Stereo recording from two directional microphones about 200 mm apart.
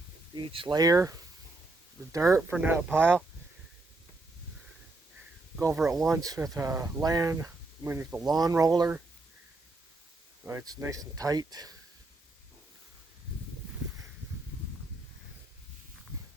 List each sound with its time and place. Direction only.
0.3 s speech: 25° right (ahead or behind)
2.1 s speech: 15° right (ahead or behind)
5.5 s speech: 10° right (ahead or behind)
10.4 s speech: 15° right (ahead or behind)